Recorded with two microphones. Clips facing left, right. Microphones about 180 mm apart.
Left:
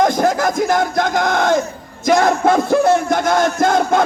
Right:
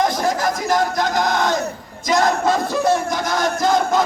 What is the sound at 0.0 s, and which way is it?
Crowd, 50° left (ahead or behind).